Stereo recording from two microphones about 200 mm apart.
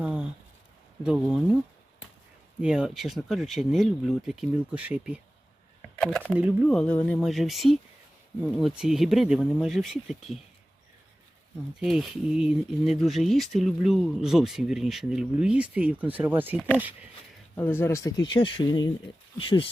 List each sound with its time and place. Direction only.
0.0 s a sound: 5° right (ahead or behind)
1.0 s speech: 5° right (ahead or behind)
2.6 s speech: 5° right (ahead or behind)
6.0 s speech: 5° left (ahead or behind)
6.3 s speech: 5° right (ahead or behind)
11.8 s speech: centre (ahead or behind)
17.5 s speech: 10° left (ahead or behind); by 19.6 s 25° left (ahead or behind)